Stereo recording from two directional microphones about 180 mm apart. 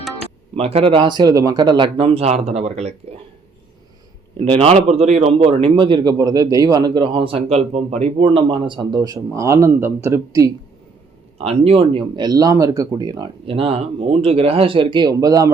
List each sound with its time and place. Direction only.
0.5 s speech: 35° right (ahead or behind)
4.5 s a man's voice: 35° right (ahead or behind); by 10.5 s 15° right (ahead or behind)
11.3 s a man's voice: 35° right (ahead or behind)